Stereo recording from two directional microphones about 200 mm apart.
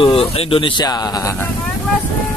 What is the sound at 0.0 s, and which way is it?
Speech, 25° left (ahead or behind).